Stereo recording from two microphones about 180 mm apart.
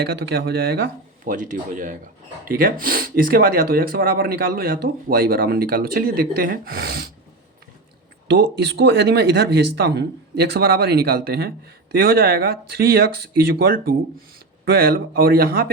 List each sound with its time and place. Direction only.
0.2 s speech: 60° right (ahead or behind)
8.3 s speech: 75° right (ahead or behind); by 15.7 s 55° right (ahead or behind)